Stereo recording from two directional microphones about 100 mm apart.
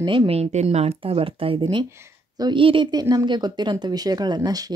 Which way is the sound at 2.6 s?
60° right (ahead or behind).